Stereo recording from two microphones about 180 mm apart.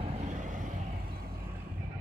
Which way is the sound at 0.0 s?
35° right (ahead or behind).